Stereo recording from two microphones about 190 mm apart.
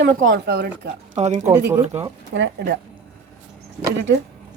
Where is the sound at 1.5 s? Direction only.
20° right (ahead or behind).